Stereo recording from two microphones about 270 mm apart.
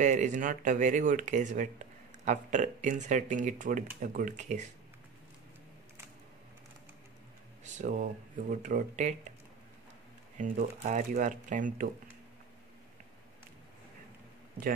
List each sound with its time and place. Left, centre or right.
0.0 s speech: right
7.6 s speech: right
10.3 s speech: right